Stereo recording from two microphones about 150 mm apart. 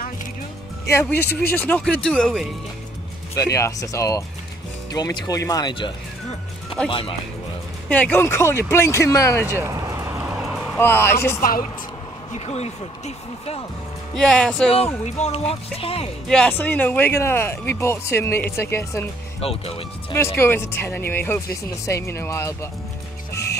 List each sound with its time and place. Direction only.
1.0 s speech: 10° left (ahead or behind)
3.3 s speech: 20° left (ahead or behind); by 7.2 s 35° left (ahead or behind)
7.9 s speech: 10° left (ahead or behind)
9.6 s a sound: 20° right (ahead or behind)
10.2 s vehicle: 5° right (ahead or behind)
10.8 s speech: 15° left (ahead or behind)
12.4 s speech: 45° left (ahead or behind)
14.3 s speech: 5° left (ahead or behind)
15.0 s speech: 50° left (ahead or behind)
16.3 s speech: 5° left (ahead or behind)
19.4 s speech: 40° left (ahead or behind)
20.2 s speech: 15° left (ahead or behind)